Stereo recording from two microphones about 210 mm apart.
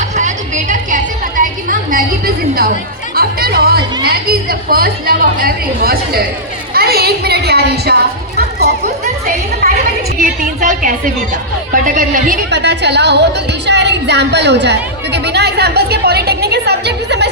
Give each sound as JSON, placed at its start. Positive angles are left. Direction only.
{"t": 0.2, "sound": "a sound", "side_deg": -35}
{"t": 3.2, "sound": "music", "side_deg": -45}
{"t": 4.0, "sound": "a woman's voice", "side_deg": -45}
{"t": 8.4, "sound": "a sound", "side_deg": -50}
{"t": 10.2, "sound": "a woman's voice", "side_deg": -40}
{"t": 12.5, "sound": "speech", "side_deg": -55}